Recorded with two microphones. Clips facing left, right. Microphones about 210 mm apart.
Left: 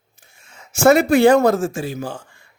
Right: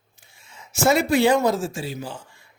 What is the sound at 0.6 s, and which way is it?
A man's voice, 55° left (ahead or behind).